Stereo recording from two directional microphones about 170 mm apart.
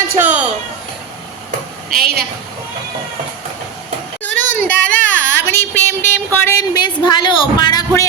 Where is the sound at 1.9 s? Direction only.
60° right (ahead or behind).